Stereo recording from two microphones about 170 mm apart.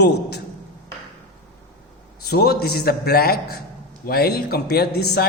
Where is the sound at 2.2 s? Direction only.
70° left (ahead or behind).